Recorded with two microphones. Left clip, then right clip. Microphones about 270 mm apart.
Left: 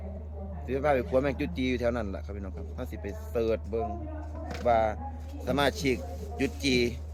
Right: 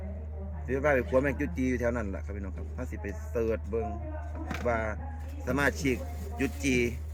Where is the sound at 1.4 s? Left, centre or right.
Left.